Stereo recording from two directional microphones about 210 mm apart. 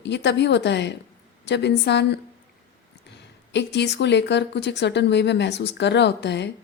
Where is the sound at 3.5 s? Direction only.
55° left (ahead or behind).